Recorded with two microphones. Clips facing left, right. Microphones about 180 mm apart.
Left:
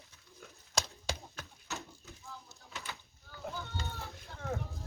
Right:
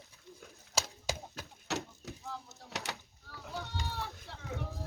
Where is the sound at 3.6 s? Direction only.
70° right (ahead or behind).